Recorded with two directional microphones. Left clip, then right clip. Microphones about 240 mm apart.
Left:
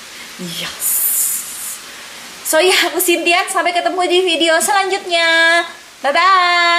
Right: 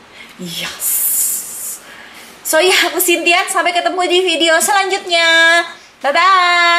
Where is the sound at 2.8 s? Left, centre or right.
Centre.